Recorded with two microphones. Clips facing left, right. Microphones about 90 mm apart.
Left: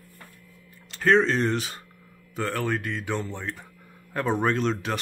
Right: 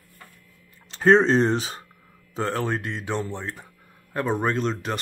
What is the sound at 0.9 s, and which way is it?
Speech, 30° right (ahead or behind).